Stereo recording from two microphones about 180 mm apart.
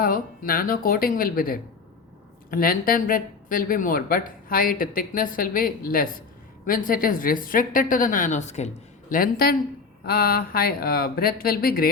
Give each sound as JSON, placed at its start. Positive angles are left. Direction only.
{"t": 0.0, "sound": "speech", "side_deg": 55}